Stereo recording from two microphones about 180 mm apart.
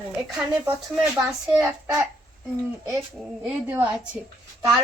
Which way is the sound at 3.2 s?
5° right (ahead or behind).